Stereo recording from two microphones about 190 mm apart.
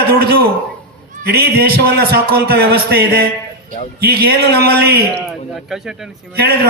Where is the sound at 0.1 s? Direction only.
55° right (ahead or behind).